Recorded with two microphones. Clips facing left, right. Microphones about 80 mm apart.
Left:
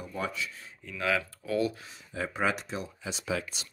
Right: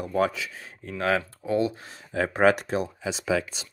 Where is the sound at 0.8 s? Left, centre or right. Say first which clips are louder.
Right 5 dB; right.